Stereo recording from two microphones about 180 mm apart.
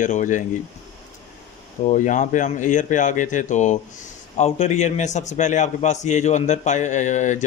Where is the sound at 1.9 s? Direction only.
45° left (ahead or behind).